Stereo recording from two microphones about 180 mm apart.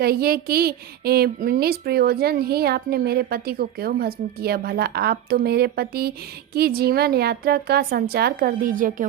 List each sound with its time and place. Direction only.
0.0 s a woman's voice: 60° right (ahead or behind)